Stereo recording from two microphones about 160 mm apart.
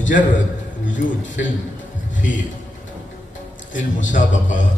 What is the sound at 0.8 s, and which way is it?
Speech, 55° left (ahead or behind).